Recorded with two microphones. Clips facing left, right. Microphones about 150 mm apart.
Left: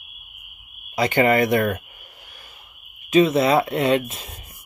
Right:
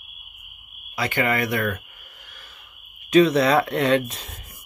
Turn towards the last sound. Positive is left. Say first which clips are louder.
# even
turn(degrees=10)  # may be behind; listen again after turning